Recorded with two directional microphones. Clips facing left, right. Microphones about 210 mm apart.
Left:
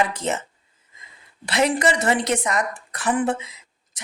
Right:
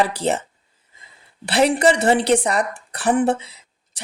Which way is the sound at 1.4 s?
30° right (ahead or behind).